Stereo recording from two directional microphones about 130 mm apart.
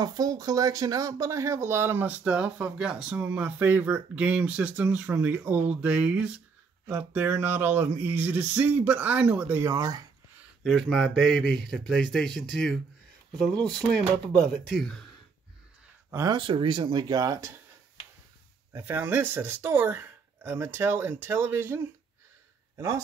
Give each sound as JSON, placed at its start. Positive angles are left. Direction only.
{"t": 0.0, "sound": "speech", "side_deg": -30}
{"t": 10.6, "sound": "speech", "side_deg": 0}
{"t": 16.1, "sound": "speech", "side_deg": -25}
{"t": 16.3, "sound": "speech", "side_deg": -40}
{"t": 18.7, "sound": "speech", "side_deg": -15}